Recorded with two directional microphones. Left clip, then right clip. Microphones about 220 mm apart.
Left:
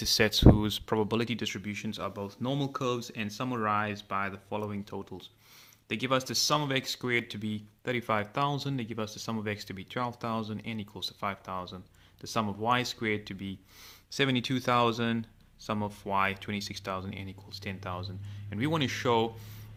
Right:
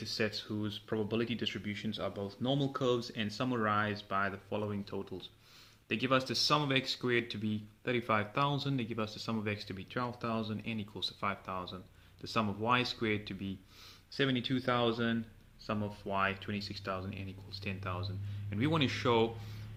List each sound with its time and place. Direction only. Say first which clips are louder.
0.0 s speech: left 12 dB; 45° left (ahead or behind); by 13.6 s 30° left (ahead or behind)
14.1 s speech: left 4 dB; 40° left (ahead or behind); by 19.3 s 25° left (ahead or behind)